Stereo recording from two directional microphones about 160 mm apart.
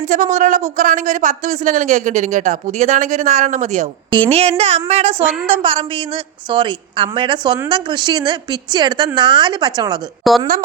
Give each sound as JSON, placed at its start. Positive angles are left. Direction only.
{"t": 0.0, "sound": "speech", "side_deg": -55}
{"t": 4.1, "sound": "a woman's voice", "side_deg": -35}
{"t": 10.3, "sound": "a woman's voice", "side_deg": 0}